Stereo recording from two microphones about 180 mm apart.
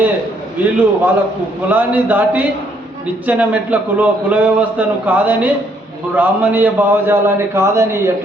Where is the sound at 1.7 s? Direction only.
10° right (ahead or behind).